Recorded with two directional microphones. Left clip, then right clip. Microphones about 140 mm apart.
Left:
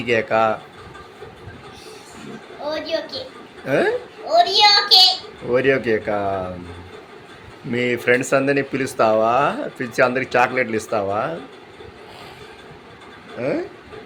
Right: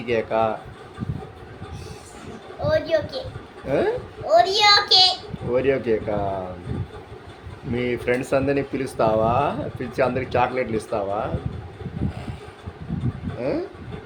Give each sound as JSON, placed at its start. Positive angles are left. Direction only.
{"t": 0.0, "sound": "speech", "side_deg": 5}
{"t": 2.6, "sound": "a child's voice", "side_deg": -25}
{"t": 3.7, "sound": "speech", "side_deg": 5}
{"t": 4.3, "sound": "a child's voice", "side_deg": -25}
{"t": 5.5, "sound": "speech", "side_deg": 5}
{"t": 7.7, "sound": "speech", "side_deg": 0}
{"t": 13.4, "sound": "speech", "side_deg": 0}